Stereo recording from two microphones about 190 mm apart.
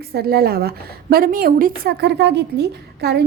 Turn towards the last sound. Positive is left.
turn(degrees=-60)  # may be behind; listen again after turning